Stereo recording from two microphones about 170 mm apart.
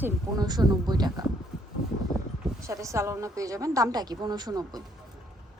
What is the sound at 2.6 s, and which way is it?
A woman's voice, 20° right (ahead or behind).